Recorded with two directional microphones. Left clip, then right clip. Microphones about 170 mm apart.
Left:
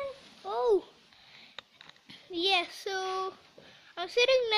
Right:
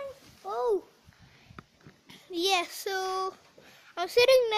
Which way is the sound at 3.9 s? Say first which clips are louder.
Right 4 dB; 60° right (ahead or behind).